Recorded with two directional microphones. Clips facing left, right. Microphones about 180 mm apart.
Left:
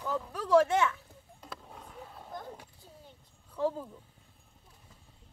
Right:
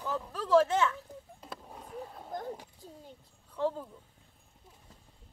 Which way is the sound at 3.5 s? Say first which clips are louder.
Left 1 dB; 10° left (ahead or behind).